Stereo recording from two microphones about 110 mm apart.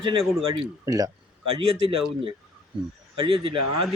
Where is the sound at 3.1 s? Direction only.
55° right (ahead or behind).